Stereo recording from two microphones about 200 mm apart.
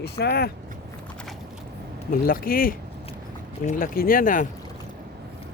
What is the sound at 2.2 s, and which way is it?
Speech, 45° left (ahead or behind).